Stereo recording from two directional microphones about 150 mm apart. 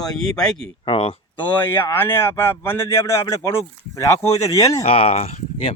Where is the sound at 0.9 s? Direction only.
40° left (ahead or behind).